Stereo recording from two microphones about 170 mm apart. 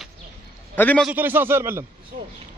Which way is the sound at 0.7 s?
10° left (ahead or behind).